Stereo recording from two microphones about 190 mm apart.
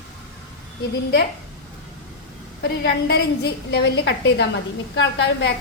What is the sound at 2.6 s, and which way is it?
A woman's voice, 60° left (ahead or behind).